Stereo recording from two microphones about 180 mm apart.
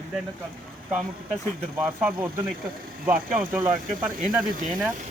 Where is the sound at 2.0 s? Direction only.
10° right (ahead or behind).